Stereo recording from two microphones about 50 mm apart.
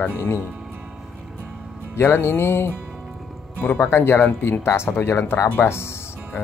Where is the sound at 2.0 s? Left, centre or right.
Left.